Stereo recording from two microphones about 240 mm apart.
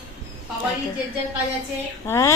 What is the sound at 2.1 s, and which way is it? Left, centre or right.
Speech, centre.